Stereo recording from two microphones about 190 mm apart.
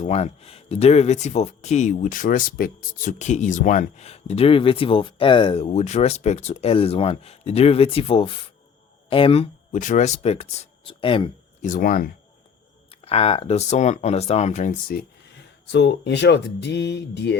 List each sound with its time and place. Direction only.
0.0 s speech: 35° left (ahead or behind)
11.7 s speech: 45° left (ahead or behind)
12.9 s speech: 30° left (ahead or behind)
15.6 s speech: 65° left (ahead or behind)